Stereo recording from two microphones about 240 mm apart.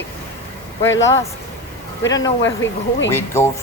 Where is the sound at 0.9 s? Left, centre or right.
Left.